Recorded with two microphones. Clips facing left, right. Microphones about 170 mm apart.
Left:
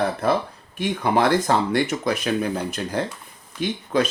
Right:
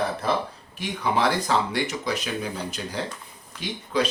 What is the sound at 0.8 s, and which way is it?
Speech, 50° left (ahead or behind).